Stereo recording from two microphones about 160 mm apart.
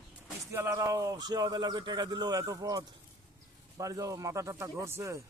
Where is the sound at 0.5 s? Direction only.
15° right (ahead or behind).